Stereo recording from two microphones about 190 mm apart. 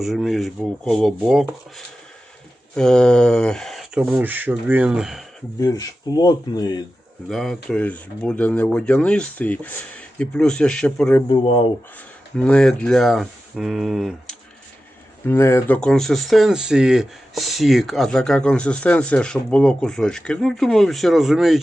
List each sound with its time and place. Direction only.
0.0 s speech: centre (ahead or behind)
2.7 s speech: 5° left (ahead or behind)
5.5 s speech: 20° left (ahead or behind)
7.3 s speech: centre (ahead or behind)
11.3 s speech: 30° left (ahead or behind)
12.4 s speech: 5° left (ahead or behind)
15.3 s speech: 15° left (ahead or behind)